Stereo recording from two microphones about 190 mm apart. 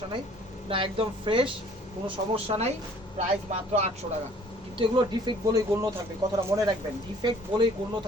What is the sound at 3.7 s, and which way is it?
Speech, 35° right (ahead or behind).